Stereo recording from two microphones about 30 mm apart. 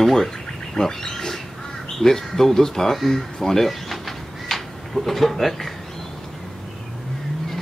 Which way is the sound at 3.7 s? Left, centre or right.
Centre.